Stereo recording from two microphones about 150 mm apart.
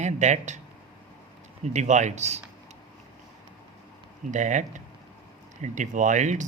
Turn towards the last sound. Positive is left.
turn(degrees=-55)  # may be behind; listen again after turning